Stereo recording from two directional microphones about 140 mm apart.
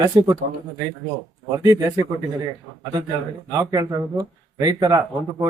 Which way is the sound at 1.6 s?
25° right (ahead or behind).